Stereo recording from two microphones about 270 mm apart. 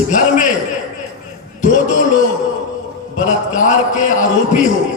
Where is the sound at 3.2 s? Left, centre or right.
Left.